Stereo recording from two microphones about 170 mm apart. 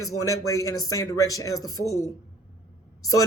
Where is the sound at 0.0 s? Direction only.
20° left (ahead or behind).